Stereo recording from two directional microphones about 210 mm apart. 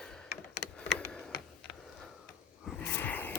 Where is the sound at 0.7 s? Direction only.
Centre (ahead or behind).